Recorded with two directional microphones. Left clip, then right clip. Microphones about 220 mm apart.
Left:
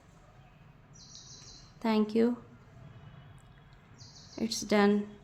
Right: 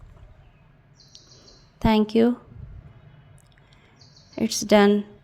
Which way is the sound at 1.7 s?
35° right (ahead or behind).